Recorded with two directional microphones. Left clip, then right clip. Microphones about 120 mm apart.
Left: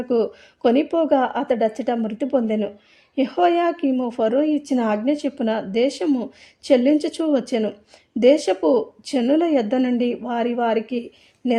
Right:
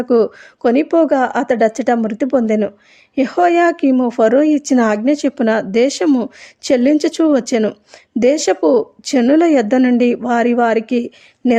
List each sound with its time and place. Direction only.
0.0 s a woman's voice: 45° right (ahead or behind)